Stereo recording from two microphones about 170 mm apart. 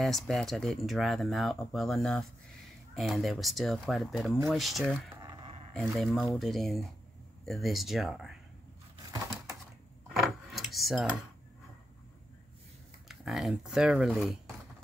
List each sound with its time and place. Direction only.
0.0 s speech: centre (ahead or behind)
5.2 s a sound: 25° right (ahead or behind)
5.9 s speech: centre (ahead or behind)
10.0 s keys jangling: centre (ahead or behind)
13.1 s speech: centre (ahead or behind)